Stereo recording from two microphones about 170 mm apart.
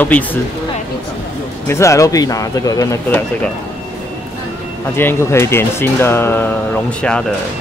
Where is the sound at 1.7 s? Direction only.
15° left (ahead or behind).